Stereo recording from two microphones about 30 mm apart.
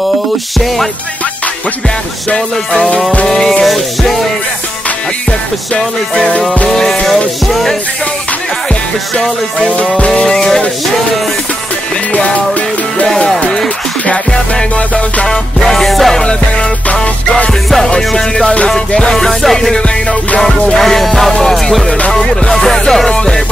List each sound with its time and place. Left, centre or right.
2.2 s music: left
3.3 s music: centre
3.6 s music: centre
6.7 s music: centre
9.7 s music: left
10.2 s music: centre
15.2 s music: centre
16.3 s music: left
17.8 s music: left